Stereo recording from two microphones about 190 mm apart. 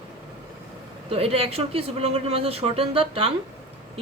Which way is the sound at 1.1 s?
30° right (ahead or behind).